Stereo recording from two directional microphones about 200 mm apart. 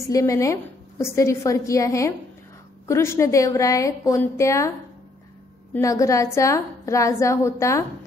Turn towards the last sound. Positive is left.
turn(degrees=15)  # may be behind; listen again after turning